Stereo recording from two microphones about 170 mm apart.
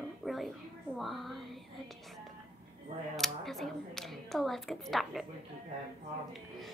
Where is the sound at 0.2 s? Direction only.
Centre (ahead or behind).